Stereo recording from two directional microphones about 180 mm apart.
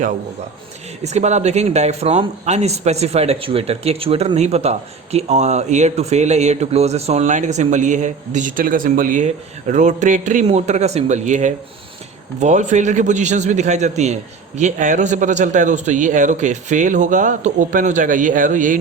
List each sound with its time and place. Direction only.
1.0 s a man's voice: 40° right (ahead or behind)